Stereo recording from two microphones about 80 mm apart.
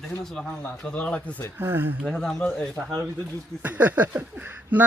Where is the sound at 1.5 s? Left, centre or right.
Right.